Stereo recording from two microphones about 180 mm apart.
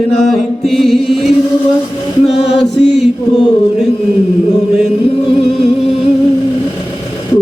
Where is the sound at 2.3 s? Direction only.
70° left (ahead or behind).